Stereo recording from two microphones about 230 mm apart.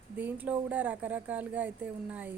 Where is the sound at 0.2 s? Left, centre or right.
Centre.